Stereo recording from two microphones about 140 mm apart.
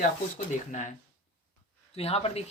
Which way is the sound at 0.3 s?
60° left (ahead or behind).